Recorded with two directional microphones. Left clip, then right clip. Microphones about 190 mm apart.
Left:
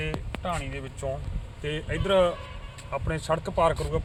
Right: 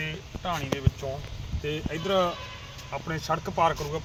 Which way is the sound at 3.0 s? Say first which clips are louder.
Left 1 dB; 35° left (ahead or behind).